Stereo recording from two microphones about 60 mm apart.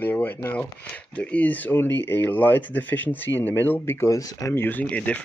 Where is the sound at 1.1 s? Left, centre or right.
Left.